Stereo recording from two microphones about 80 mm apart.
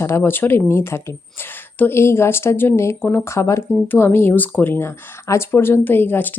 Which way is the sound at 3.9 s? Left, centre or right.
Left.